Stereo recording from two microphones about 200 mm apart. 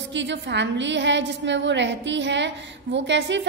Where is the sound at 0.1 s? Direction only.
65° right (ahead or behind).